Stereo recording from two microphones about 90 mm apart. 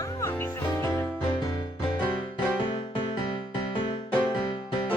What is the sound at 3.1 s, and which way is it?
Music, 55° left (ahead or behind).